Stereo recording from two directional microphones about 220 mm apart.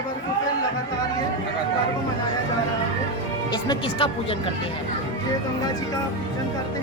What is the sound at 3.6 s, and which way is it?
Speech, 25° left (ahead or behind).